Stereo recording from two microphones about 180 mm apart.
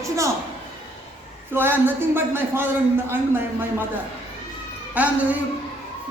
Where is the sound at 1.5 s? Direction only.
10° right (ahead or behind).